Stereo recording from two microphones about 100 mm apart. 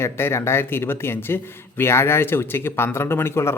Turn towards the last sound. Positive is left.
turn(degrees=25)  # may be behind; listen again after turning